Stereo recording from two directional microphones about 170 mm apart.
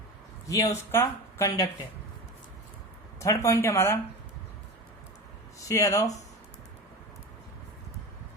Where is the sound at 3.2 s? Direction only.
20° left (ahead or behind).